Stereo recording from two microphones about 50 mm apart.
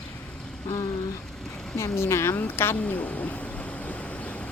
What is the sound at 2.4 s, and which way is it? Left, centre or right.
Speech, left.